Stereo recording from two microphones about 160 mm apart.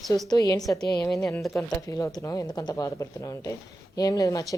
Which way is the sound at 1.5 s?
20° left (ahead or behind).